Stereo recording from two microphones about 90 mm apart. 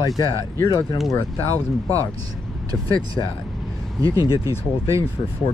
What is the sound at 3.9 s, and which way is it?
Speech, 40° right (ahead or behind).